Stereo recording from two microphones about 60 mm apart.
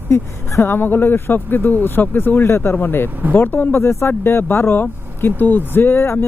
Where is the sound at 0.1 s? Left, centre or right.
Left.